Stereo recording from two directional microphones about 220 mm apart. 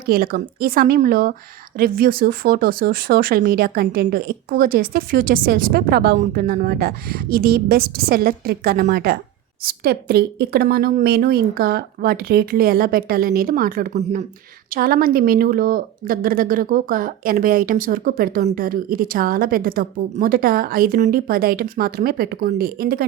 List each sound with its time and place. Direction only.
0.0 s speech: 40° right (ahead or behind)